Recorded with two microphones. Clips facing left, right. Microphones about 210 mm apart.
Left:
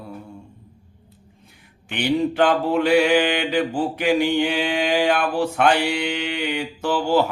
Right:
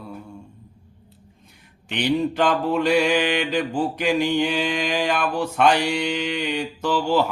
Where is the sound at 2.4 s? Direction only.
60° left (ahead or behind).